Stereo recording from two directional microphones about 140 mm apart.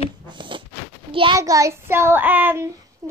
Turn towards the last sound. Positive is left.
turn(degrees=-20)  # may be behind; listen again after turning